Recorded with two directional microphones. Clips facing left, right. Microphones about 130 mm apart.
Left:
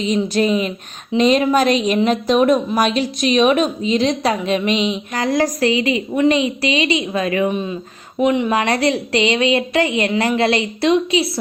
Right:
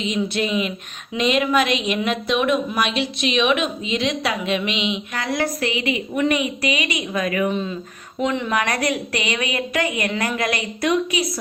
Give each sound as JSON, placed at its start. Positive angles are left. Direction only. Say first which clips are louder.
{"t": 0.0, "sound": "a woman's voice", "louder": "left 5 dB", "side_deg": 40}
{"t": 7.5, "sound": "a woman's voice", "louder": "left 2 dB", "side_deg": 15}
{"t": 8.5, "sound": "a woman's voice", "louder": "left 5 dB", "side_deg": 30}